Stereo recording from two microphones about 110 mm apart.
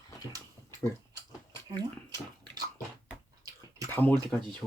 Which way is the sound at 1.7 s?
40° right (ahead or behind).